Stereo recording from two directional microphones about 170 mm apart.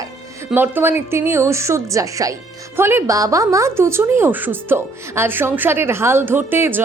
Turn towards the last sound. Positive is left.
turn(degrees=-10)  # may be behind; listen again after turning